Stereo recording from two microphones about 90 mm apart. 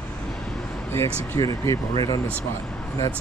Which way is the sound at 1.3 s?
35° left (ahead or behind).